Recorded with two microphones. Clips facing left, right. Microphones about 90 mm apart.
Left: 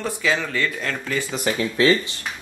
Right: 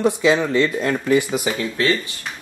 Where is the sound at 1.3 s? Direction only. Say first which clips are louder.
Right 1 dB; 5° right (ahead or behind).